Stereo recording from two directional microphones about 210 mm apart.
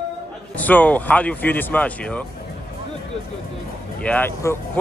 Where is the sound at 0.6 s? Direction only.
5° left (ahead or behind).